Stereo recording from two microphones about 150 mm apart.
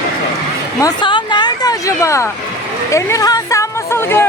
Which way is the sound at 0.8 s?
30° left (ahead or behind).